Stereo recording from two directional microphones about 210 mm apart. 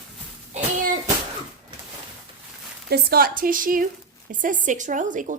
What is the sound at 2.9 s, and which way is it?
A woman's voice, 45° right (ahead or behind).